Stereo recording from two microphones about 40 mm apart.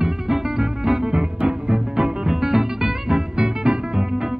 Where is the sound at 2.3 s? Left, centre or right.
Centre.